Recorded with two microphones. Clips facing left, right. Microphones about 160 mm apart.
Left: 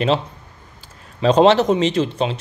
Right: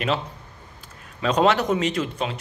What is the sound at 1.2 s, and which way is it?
Speech, 30° left (ahead or behind).